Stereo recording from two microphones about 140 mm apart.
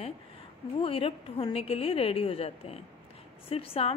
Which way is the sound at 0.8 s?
40° left (ahead or behind).